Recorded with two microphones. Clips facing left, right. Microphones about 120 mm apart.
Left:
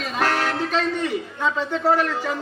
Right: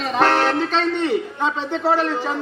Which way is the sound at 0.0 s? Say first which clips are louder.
Right 5 dB; 30° right (ahead or behind).